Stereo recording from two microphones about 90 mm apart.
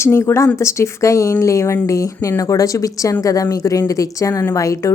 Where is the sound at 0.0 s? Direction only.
30° left (ahead or behind).